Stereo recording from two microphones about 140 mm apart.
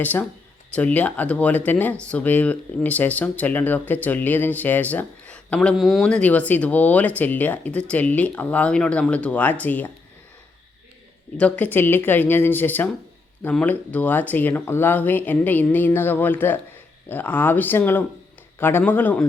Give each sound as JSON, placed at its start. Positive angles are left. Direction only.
{"t": 0.0, "sound": "speech", "side_deg": 10}
{"t": 11.3, "sound": "speech", "side_deg": 10}